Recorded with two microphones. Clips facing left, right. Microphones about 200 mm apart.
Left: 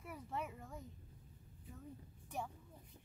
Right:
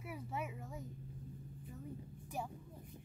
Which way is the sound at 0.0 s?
5° right (ahead or behind).